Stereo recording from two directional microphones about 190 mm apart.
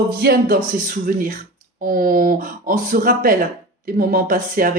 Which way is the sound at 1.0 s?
45° right (ahead or behind).